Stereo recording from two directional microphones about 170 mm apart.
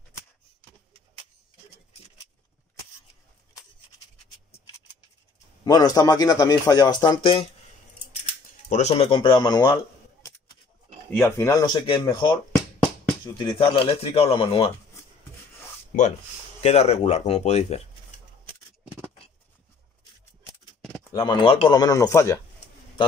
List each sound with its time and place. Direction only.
5.7 s speech: 25° left (ahead or behind)
8.6 s speech: 40° left (ahead or behind); by 9.7 s 25° left (ahead or behind)
11.1 s speech: 15° left (ahead or behind); by 14.7 s 35° left (ahead or behind)
15.9 s speech: 45° left (ahead or behind)
21.1 s speech: 25° left (ahead or behind)